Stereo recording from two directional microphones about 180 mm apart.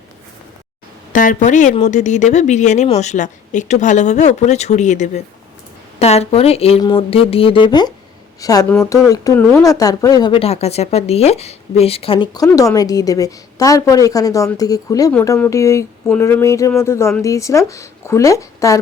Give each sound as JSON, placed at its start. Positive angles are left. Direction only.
{"t": 1.1, "sound": "a woman's voice", "side_deg": 45}